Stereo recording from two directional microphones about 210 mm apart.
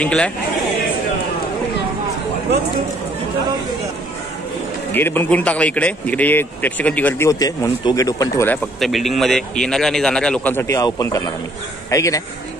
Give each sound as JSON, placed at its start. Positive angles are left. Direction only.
{"t": 0.0, "sound": "a man's voice", "side_deg": 5}
{"t": 4.9, "sound": "speech", "side_deg": 10}
{"t": 8.7, "sound": "a man's voice", "side_deg": 0}